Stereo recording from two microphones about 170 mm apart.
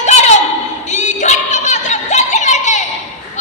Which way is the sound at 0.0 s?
40° left (ahead or behind).